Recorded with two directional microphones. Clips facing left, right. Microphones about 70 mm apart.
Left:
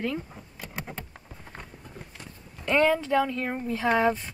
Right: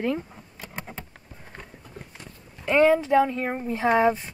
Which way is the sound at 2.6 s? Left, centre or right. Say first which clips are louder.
Right 4 dB; centre.